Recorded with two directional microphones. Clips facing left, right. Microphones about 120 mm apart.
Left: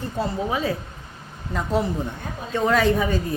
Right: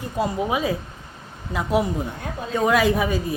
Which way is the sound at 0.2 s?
15° right (ahead or behind).